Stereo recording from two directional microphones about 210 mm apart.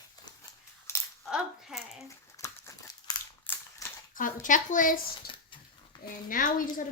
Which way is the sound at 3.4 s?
10° left (ahead or behind).